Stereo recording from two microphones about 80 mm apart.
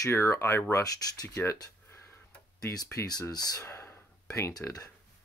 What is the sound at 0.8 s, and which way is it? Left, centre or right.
Speech, left.